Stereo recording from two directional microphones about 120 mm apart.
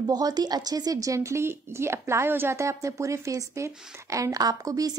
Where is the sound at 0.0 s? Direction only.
35° right (ahead or behind).